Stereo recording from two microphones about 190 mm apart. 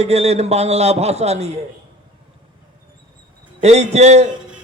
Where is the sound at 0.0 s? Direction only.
35° right (ahead or behind).